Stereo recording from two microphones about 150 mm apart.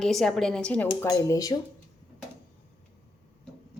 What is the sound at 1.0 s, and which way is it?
Speech, 20° left (ahead or behind).